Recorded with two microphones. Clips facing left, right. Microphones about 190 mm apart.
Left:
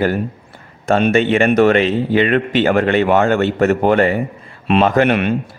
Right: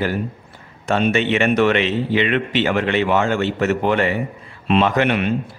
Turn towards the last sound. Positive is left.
turn(degrees=60)  # may be behind; listen again after turning